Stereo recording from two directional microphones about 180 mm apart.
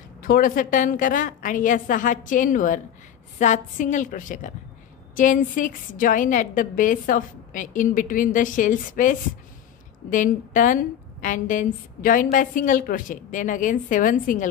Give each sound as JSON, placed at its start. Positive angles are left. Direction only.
{"t": 0.2, "sound": "a woman's voice", "side_deg": 50}